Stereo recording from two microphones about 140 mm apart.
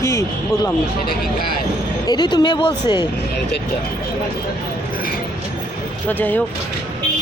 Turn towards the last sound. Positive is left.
turn(degrees=10)  # may be behind; listen again after turning